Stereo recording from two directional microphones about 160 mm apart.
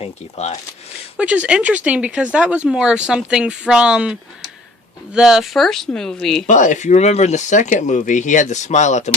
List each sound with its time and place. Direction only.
0.0 s speech: 45° left (ahead or behind)
1.2 s speech: 5° right (ahead or behind)
6.5 s speech: 50° left (ahead or behind)